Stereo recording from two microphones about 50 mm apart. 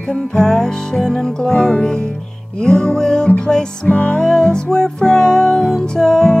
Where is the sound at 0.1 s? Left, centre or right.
Centre.